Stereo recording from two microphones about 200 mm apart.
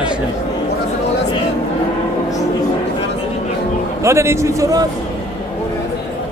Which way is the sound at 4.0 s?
15° right (ahead or behind).